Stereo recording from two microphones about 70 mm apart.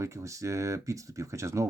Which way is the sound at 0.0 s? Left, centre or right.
Right.